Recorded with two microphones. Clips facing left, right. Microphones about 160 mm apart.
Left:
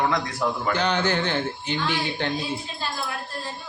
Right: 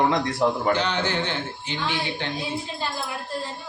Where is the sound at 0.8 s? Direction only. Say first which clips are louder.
Left 2 dB; 45° left (ahead or behind).